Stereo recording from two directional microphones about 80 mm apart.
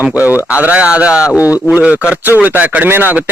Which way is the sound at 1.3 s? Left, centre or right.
Left.